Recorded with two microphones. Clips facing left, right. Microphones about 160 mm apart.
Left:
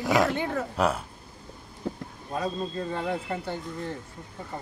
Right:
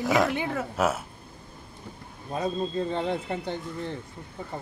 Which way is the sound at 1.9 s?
90° left.